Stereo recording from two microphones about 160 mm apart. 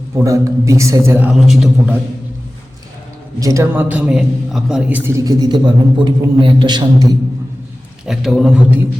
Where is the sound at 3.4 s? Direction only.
20° right (ahead or behind).